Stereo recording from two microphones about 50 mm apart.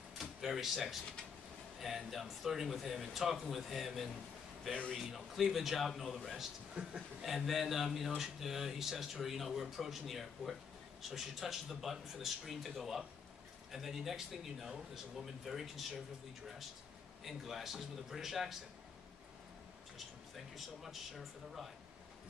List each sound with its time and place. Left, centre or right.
0.2 s a sound: centre
1.8 s speech: centre
6.7 s a man's voice: centre
7.2 s speech: centre
17.2 s speech: centre
20.3 s speech: centre